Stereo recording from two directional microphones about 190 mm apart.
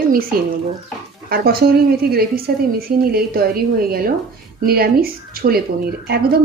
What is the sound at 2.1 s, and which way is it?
Speech, 50° right (ahead or behind).